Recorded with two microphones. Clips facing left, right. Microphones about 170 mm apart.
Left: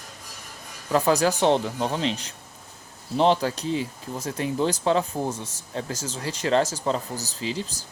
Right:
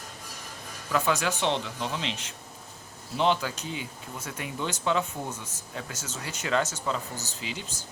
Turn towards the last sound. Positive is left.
turn(degrees=35)  # may be behind; listen again after turning